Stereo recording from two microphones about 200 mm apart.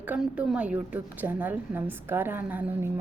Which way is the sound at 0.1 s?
5° right (ahead or behind).